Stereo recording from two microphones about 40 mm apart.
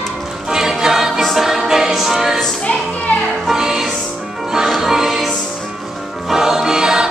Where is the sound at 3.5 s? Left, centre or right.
Centre.